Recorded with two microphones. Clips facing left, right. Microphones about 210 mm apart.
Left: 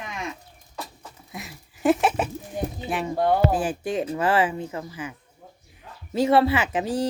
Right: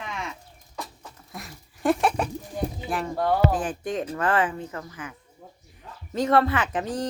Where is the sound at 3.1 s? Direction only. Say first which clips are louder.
Left 2 dB; 20° left (ahead or behind).